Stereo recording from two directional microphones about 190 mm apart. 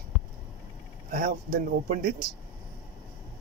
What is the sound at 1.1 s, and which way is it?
Speech, 50° right (ahead or behind).